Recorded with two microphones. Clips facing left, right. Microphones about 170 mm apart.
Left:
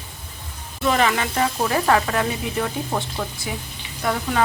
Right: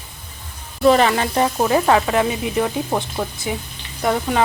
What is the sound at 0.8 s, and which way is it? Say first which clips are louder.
Speech: right 6 dB; 35° right (ahead or behind).